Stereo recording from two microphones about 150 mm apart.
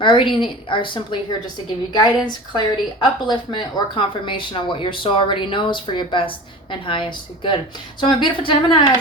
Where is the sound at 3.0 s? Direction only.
30° left (ahead or behind).